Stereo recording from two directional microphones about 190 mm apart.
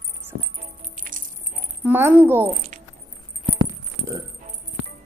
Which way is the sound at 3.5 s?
25° right (ahead or behind).